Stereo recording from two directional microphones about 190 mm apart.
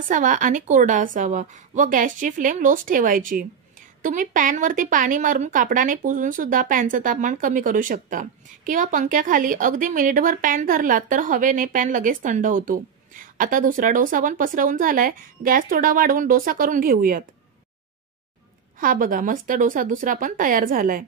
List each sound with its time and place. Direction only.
0.1 s a woman's voice: 45° right (ahead or behind)
18.8 s a woman's voice: 45° right (ahead or behind)